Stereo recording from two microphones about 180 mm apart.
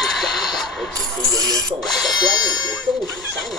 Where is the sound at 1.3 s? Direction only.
20° right (ahead or behind).